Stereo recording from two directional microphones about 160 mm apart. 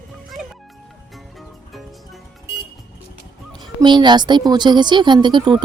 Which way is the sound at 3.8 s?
30° right (ahead or behind).